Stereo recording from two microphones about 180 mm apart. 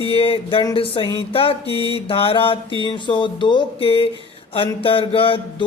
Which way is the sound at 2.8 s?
25° left (ahead or behind).